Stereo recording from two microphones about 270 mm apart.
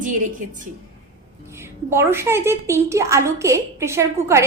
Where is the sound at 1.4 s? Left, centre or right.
Centre.